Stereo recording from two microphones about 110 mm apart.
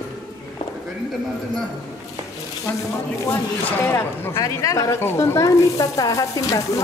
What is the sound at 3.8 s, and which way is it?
A woman's voice, 20° left (ahead or behind).